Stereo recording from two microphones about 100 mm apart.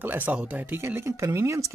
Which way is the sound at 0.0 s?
20° right (ahead or behind).